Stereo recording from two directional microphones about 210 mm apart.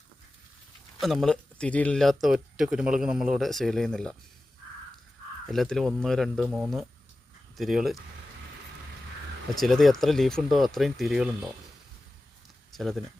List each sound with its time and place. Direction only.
0.9 s speech: centre (ahead or behind)
5.5 s speech: centre (ahead or behind)
9.6 s speech: centre (ahead or behind)
12.7 s speech: centre (ahead or behind)